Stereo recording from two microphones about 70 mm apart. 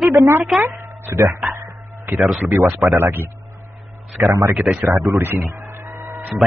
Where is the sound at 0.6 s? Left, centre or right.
Right.